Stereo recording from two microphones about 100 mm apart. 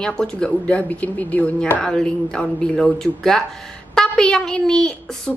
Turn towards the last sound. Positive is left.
turn(degrees=5)  # may be behind; listen again after turning